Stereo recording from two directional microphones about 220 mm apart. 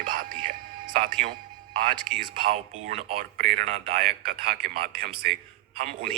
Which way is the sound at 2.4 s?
30° right (ahead or behind).